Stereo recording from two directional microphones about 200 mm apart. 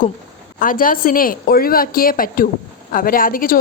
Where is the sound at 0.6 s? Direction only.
45° left (ahead or behind).